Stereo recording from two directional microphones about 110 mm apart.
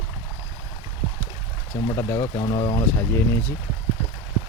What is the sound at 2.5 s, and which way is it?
Speech, 40° left (ahead or behind).